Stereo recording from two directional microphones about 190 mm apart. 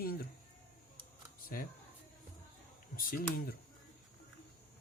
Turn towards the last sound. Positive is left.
turn(degrees=50)  # may be behind; listen again after turning